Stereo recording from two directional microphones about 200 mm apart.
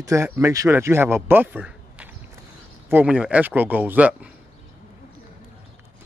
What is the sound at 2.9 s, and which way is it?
Speech, 5° right (ahead or behind).